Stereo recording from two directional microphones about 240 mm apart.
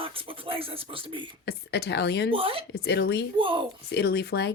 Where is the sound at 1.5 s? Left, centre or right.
Left.